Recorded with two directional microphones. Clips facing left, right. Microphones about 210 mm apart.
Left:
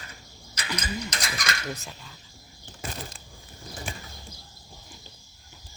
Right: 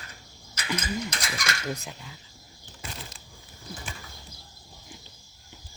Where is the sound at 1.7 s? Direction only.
15° right (ahead or behind).